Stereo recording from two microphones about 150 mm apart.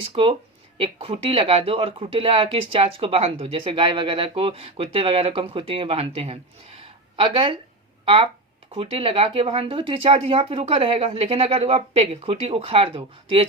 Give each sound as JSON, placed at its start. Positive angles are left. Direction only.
{"t": 0.0, "sound": "speech", "side_deg": -40}